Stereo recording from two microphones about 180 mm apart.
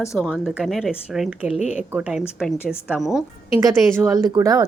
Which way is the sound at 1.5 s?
40° left (ahead or behind).